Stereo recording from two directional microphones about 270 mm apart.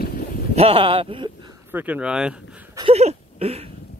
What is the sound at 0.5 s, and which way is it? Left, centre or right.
Speech, right.